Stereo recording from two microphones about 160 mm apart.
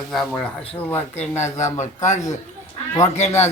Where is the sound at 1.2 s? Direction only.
45° left (ahead or behind).